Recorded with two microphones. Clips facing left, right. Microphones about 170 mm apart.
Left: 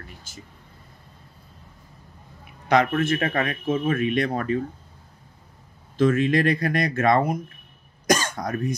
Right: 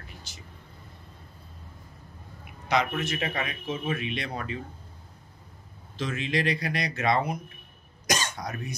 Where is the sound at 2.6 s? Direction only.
55° left (ahead or behind).